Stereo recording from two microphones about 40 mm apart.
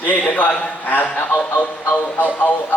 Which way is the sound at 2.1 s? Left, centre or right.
Left.